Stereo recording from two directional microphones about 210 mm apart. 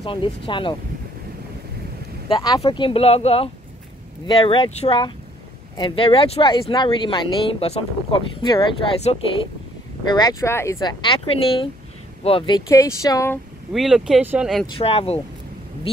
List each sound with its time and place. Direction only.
0.0 s speech: 25° left (ahead or behind)
2.2 s speech: 20° left (ahead or behind)
13.7 s speech: centre (ahead or behind)
14.8 s speech: 25° left (ahead or behind)